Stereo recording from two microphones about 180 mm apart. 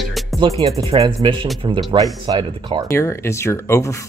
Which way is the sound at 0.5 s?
20° right (ahead or behind).